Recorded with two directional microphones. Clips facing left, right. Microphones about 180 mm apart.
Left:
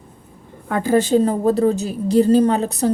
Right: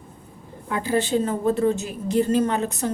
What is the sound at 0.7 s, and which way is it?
A woman's voice, 45° left (ahead or behind).